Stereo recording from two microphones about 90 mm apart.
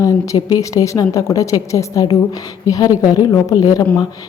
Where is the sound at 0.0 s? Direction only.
40° left (ahead or behind).